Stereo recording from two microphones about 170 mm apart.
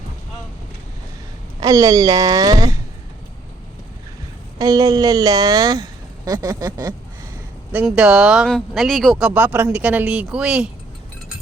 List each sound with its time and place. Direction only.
1.6 s a woman's voice: 20° right (ahead or behind)
4.5 s a woman's voice: 20° right (ahead or behind)
7.7 s speech: 5° right (ahead or behind)